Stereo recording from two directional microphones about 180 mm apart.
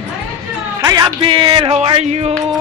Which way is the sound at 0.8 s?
25° right (ahead or behind).